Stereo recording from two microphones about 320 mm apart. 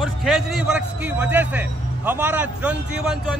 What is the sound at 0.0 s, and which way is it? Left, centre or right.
A man's voice, centre.